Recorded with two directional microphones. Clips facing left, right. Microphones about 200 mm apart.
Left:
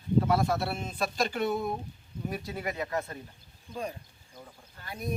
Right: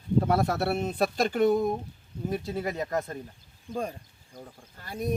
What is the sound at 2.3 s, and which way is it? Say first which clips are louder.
Speech: right 5 dB; 30° right (ahead or behind).